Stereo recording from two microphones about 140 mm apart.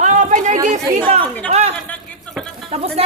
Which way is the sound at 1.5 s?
50° right (ahead or behind).